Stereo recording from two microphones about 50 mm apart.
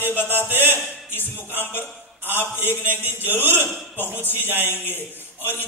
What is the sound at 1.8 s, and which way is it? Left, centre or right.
Speech, right.